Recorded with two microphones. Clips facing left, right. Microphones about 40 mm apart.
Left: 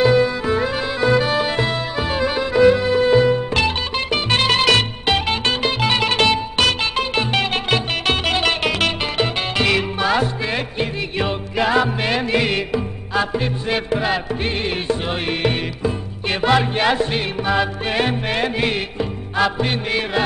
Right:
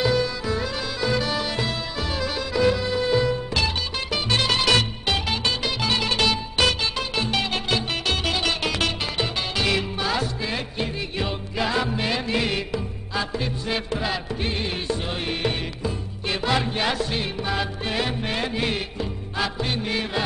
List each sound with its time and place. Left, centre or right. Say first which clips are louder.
0.0 s music: left 7 dB; left
4.6 s music: left 5 dB; centre
5.1 s music: left 6 dB; left